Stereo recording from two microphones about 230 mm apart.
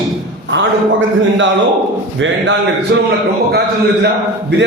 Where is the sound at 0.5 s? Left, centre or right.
Right.